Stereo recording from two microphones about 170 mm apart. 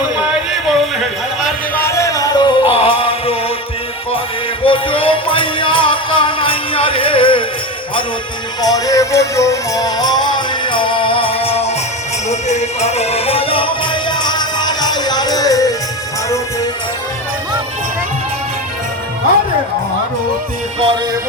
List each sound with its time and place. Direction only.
0.2 s a sound: centre (ahead or behind)
1.8 s music: 15° left (ahead or behind); by 3.3 s 35° left (ahead or behind)
4.6 s music: 30° left (ahead or behind)
8.6 s music: 20° left (ahead or behind)